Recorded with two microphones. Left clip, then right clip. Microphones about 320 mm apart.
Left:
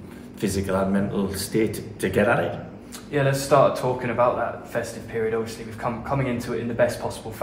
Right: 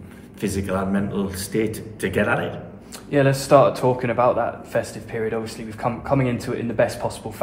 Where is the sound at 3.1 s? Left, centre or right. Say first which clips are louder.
Right 4 dB; right.